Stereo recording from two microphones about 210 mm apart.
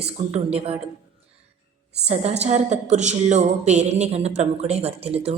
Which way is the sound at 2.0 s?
30° right (ahead or behind).